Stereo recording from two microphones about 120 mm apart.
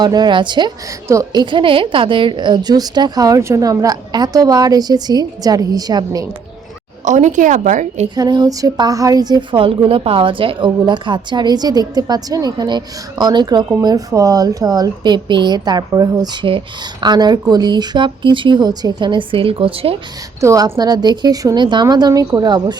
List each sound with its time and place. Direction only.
0.0 s speech: 35° right (ahead or behind)
1.0 s speech: 25° right (ahead or behind)
7.0 s a woman's voice: 90° right
8.1 s speech: 35° right (ahead or behind); by 20.0 s 50° right (ahead or behind)
20.4 s speech: 25° right (ahead or behind)